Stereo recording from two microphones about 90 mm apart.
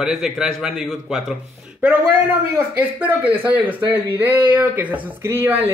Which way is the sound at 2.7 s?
20° right (ahead or behind).